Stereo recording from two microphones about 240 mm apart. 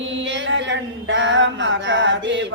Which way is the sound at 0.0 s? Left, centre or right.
Right.